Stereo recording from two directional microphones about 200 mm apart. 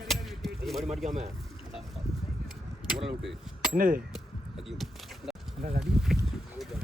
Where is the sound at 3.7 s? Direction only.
45° right (ahead or behind).